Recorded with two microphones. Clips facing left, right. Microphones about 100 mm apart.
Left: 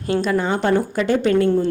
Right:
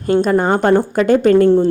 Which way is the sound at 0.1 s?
45° right (ahead or behind).